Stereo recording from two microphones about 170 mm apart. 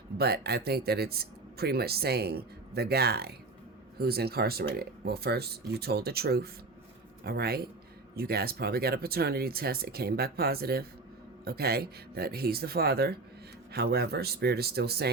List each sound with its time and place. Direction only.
0.2 s speech: 70° right (ahead or behind)